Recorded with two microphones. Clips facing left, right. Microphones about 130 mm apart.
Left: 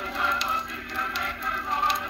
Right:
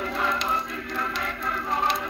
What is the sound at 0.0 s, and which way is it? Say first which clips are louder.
Choir: right 2 dB; 45° right (ahead or behind).